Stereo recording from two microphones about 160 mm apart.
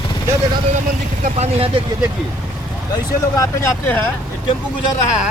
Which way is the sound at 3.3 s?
15° left (ahead or behind).